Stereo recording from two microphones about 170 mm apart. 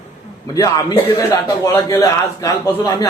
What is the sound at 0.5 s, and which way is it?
A man's voice, 20° left (ahead or behind).